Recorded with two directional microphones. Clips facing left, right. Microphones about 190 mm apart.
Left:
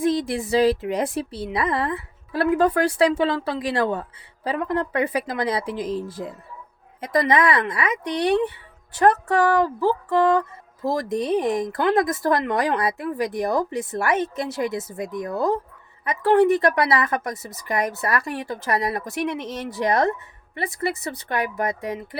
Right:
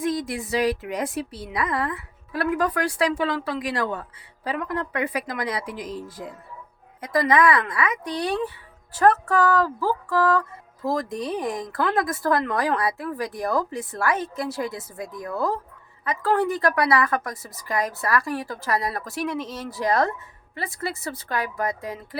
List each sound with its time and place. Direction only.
0.0 s speech: 30° left (ahead or behind)